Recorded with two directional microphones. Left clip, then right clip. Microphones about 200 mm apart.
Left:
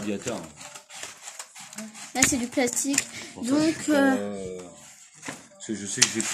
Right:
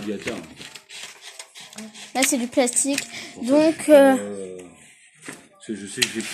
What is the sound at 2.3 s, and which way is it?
Speech, 10° right (ahead or behind).